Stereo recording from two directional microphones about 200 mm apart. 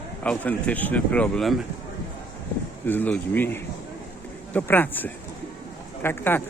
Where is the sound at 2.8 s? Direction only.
10° left (ahead or behind).